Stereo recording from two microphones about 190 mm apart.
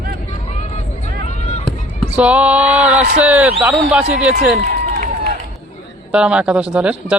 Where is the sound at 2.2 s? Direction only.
5° right (ahead or behind).